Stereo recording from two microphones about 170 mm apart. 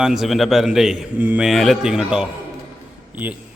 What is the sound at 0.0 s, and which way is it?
A man's voice, centre (ahead or behind).